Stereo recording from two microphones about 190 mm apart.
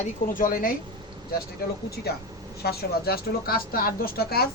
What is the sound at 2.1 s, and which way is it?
Speech, 55° left (ahead or behind).